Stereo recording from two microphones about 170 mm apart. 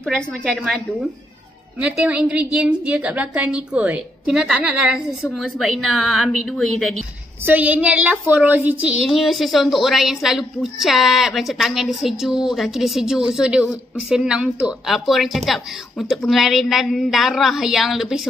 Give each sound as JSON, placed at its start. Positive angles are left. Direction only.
{"t": 0.0, "sound": "a woman's voice", "side_deg": 5}
{"t": 1.8, "sound": "a woman's voice", "side_deg": -5}
{"t": 7.4, "sound": "a woman's voice", "side_deg": -10}